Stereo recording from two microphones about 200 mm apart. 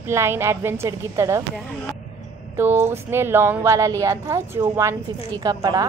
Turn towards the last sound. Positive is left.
turn(degrees=-20)  # may be behind; listen again after turning